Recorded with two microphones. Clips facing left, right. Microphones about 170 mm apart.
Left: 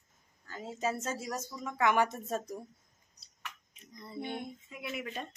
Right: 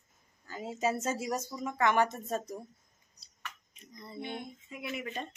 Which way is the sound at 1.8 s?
5° left (ahead or behind).